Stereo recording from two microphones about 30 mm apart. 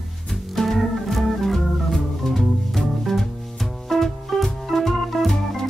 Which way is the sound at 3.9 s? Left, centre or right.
Centre.